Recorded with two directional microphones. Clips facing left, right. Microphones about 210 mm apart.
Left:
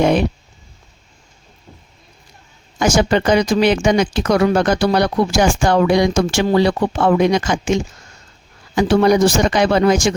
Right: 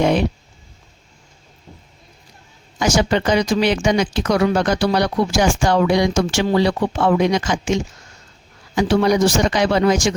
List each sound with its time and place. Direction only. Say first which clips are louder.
0.0 s speech: left 2 dB; 50° left (ahead or behind)
2.7 s speech: left 2 dB; 50° left (ahead or behind)